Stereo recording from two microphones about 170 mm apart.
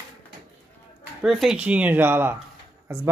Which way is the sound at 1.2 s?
Centre (ahead or behind).